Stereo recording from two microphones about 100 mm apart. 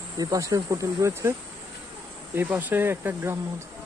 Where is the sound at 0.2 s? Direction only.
35° right (ahead or behind).